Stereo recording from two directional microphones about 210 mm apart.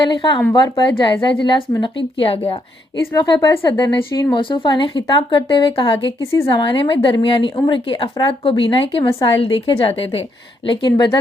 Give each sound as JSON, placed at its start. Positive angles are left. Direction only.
{"t": 0.1, "sound": "a woman's voice", "side_deg": 20}